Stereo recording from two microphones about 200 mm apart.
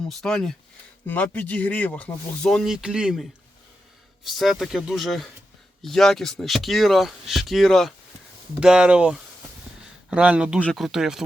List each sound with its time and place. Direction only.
0.1 s speech: centre (ahead or behind)